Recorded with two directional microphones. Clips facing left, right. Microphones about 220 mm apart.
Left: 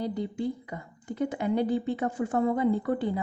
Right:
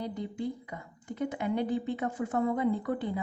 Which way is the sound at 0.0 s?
35° left (ahead or behind).